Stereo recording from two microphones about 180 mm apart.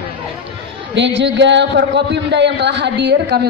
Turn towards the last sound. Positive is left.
turn(degrees=-70)  # may be behind; listen again after turning